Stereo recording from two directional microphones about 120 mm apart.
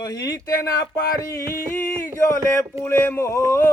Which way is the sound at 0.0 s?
30° left (ahead or behind).